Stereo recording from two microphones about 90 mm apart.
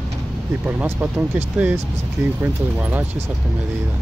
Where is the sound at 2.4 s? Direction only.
20° right (ahead or behind).